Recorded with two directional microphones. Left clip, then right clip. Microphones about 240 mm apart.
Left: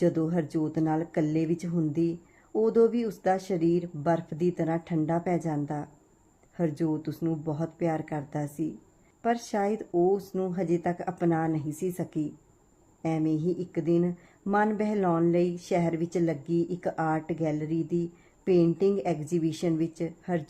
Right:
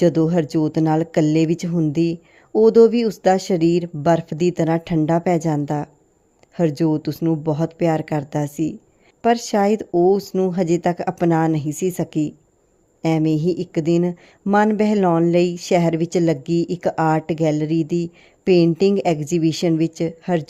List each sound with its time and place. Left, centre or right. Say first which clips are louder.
0.0 s speech: right 10 dB; right